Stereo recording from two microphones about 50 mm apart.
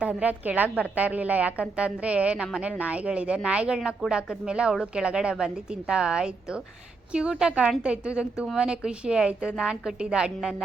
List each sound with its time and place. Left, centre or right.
0.0 s a woman's voice: right